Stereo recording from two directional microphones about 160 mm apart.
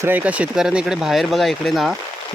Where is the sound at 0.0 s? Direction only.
10° right (ahead or behind).